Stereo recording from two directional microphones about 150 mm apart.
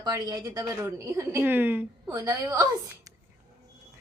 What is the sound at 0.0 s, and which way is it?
Speech, 25° right (ahead or behind).